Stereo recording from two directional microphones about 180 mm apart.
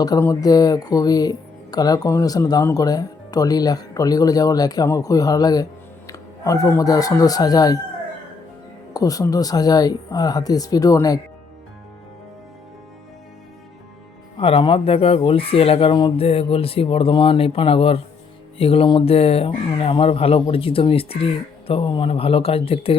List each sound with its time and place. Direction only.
0.0 s speech: 20° left (ahead or behind)
8.9 s speech: 20° left (ahead or behind)
14.3 s speech: 30° left (ahead or behind)